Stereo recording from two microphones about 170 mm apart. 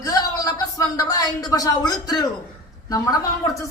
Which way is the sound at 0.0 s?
20° left (ahead or behind).